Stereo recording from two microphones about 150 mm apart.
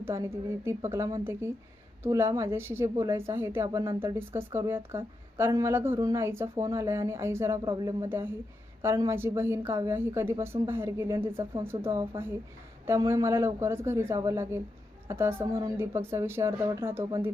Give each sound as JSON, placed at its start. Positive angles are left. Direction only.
{"t": 0.0, "sound": "a woman's voice", "side_deg": -20}
{"t": 8.8, "sound": "a woman's voice", "side_deg": -15}